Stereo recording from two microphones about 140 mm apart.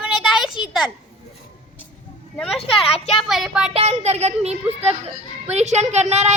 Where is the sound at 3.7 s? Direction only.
50° right (ahead or behind).